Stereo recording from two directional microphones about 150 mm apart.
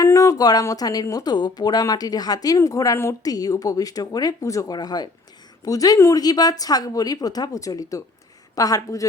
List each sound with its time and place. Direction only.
0.0 s speech: 20° left (ahead or behind)